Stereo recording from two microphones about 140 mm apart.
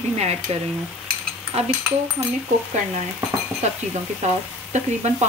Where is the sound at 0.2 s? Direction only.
50° right (ahead or behind).